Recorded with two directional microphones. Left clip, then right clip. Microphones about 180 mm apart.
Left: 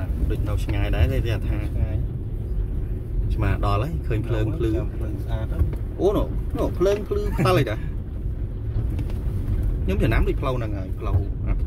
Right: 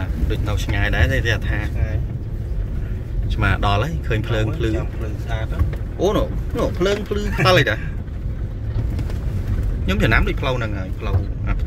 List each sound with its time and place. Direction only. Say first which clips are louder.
0.3 s speech: right 5 dB; centre (ahead or behind)
3.3 s speech: right 6 dB; 5° left (ahead or behind)
5.9 s speech: right 3 dB; 10° left (ahead or behind)
9.8 s speech: right 6 dB; 5° left (ahead or behind)